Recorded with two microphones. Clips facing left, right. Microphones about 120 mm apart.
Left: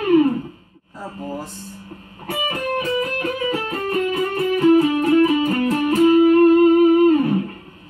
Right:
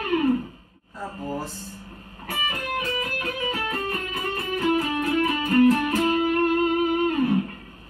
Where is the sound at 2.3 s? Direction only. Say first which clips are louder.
Left 6 dB; 30° left (ahead or behind).